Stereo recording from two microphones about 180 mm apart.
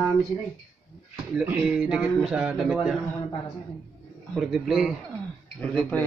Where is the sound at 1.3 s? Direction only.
5° right (ahead or behind).